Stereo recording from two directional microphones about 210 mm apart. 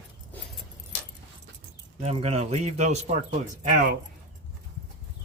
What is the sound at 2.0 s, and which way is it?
Speech, 30° right (ahead or behind).